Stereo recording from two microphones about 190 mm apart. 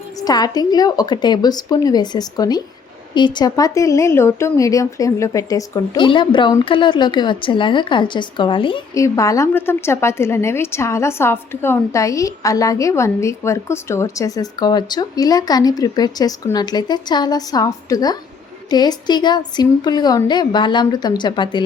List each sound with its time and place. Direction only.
0.2 s a woman's voice: 20° left (ahead or behind)